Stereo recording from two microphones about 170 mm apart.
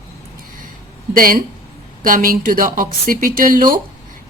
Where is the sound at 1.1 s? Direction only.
55° right (ahead or behind).